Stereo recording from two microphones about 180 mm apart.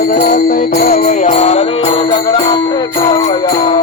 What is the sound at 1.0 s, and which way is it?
Music, 40° left (ahead or behind).